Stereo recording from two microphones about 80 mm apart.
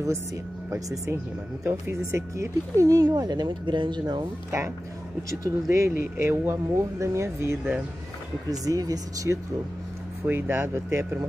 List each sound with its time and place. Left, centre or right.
0.7 s speech: right
4.5 s speech: right
8.5 s speech: right
10.2 s speech: right